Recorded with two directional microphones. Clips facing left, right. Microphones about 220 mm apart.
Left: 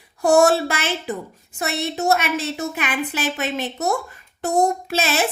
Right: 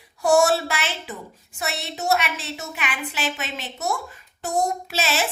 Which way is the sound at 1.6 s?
50° left (ahead or behind).